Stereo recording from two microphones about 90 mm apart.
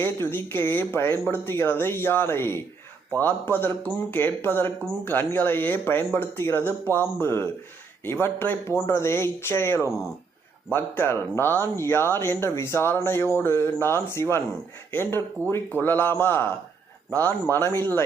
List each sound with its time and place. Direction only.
0.0 s speech: 25° left (ahead or behind)